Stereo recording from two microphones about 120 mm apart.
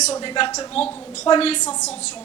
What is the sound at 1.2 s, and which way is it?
Speech, 50° left (ahead or behind).